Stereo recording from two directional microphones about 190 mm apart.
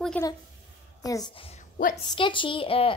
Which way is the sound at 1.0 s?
20° left (ahead or behind).